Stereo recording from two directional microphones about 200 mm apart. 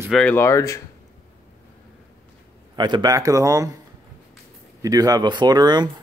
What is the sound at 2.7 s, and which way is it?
Speech, 20° right (ahead or behind).